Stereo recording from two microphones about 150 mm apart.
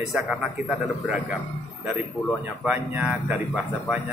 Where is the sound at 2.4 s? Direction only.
10° right (ahead or behind).